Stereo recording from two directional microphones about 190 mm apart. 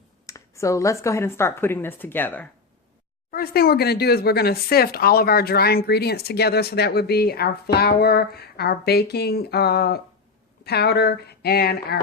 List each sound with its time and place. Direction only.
0.3 s speech: 15° left (ahead or behind)
3.3 s speech: 55° left (ahead or behind)